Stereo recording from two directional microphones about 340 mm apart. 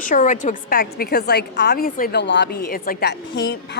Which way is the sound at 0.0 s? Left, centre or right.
Left.